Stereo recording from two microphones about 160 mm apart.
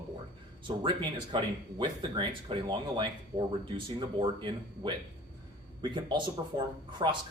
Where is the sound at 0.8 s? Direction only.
30° right (ahead or behind).